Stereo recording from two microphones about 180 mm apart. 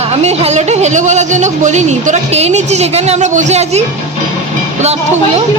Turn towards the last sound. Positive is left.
turn(degrees=-35)  # may be behind; listen again after turning